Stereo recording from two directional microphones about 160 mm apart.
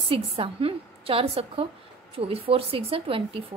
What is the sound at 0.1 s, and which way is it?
A woman's voice, 35° right (ahead or behind).